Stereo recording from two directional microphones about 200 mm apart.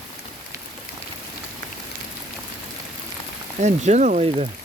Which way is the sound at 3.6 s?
35° right (ahead or behind).